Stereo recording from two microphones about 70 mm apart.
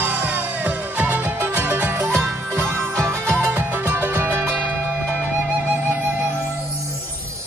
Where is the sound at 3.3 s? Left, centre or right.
Right.